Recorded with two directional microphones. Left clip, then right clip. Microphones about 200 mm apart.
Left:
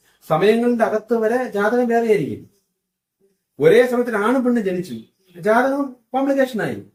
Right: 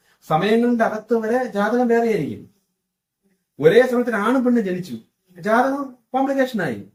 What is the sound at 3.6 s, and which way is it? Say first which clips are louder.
Speech: left 1 dB; 15° left (ahead or behind).